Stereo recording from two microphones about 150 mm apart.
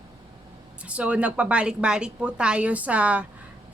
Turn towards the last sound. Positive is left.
turn(degrees=-10)  # may be behind; listen again after turning